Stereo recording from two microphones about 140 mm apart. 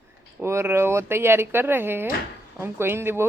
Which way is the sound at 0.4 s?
20° right (ahead or behind).